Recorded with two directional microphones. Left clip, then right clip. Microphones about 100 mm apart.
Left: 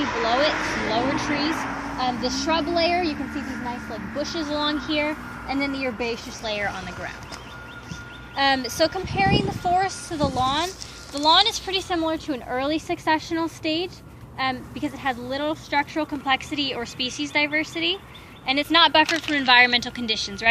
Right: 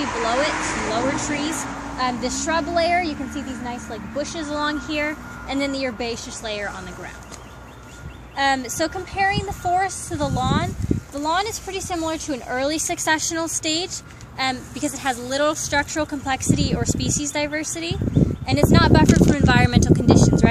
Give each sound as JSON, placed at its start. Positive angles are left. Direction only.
{"t": 0.0, "sound": "a sound", "side_deg": -20}
{"t": 0.3, "sound": "speech", "side_deg": -5}
{"t": 0.5, "sound": "speech", "side_deg": -20}
{"t": 1.1, "sound": "speech", "side_deg": -5}
{"t": 2.0, "sound": "speech", "side_deg": -15}
{"t": 8.4, "sound": "speech", "side_deg": 50}
{"t": 11.1, "sound": "speech", "side_deg": -10}
{"t": 11.4, "sound": "speech", "side_deg": -25}
{"t": 11.9, "sound": "a woman's voice", "side_deg": -40}
{"t": 18.4, "sound": "speech", "side_deg": -35}